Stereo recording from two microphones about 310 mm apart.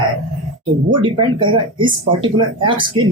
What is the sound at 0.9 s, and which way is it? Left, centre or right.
Speech, centre.